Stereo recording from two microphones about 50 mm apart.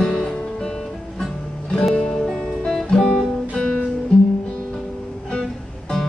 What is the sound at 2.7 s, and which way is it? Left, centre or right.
Guitar, centre.